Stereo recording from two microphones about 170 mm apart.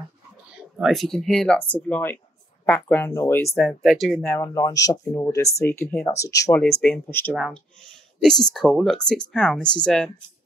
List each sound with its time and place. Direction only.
0.6 s speech: 5° right (ahead or behind); by 3.5 s 15° left (ahead or behind)
3.5 s speech: centre (ahead or behind)
4.4 s speech: 20° left (ahead or behind)